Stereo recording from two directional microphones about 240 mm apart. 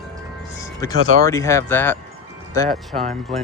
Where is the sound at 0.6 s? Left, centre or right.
Centre.